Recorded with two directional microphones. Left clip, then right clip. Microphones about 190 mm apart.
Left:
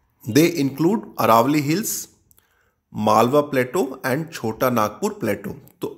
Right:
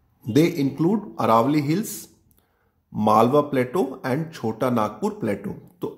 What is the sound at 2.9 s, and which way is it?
Speech, 5° left (ahead or behind).